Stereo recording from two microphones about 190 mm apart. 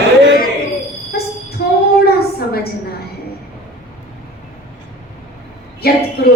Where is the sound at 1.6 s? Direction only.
55° left (ahead or behind).